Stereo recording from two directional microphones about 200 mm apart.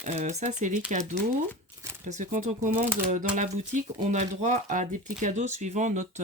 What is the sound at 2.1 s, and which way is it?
Speech, 40° right (ahead or behind).